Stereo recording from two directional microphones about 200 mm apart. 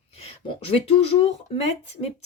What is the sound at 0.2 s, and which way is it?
Speech, 30° left (ahead or behind).